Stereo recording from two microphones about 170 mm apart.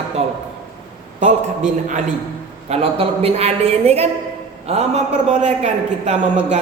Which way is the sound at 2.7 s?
35° right (ahead or behind).